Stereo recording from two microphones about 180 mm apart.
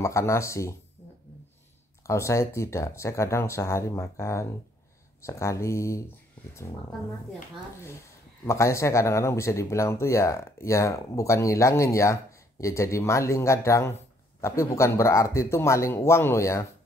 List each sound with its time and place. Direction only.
0.0 s speech: 15° left (ahead or behind)
2.0 s speech: 15° left (ahead or behind)
8.5 s speech: 15° left (ahead or behind)